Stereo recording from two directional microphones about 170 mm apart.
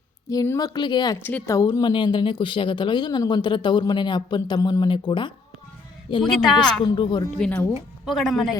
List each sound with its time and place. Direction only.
0.3 s speech: 20° left (ahead or behind)
1.2 s speech: 10° left (ahead or behind)
1.5 s speech: 20° left (ahead or behind)
6.4 s a woman's voice: centre (ahead or behind)
6.8 s speech: 30° left (ahead or behind)
7.3 s a woman's voice: 5° left (ahead or behind)